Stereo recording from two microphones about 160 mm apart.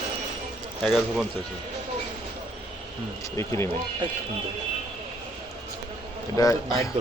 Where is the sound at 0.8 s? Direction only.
5° left (ahead or behind).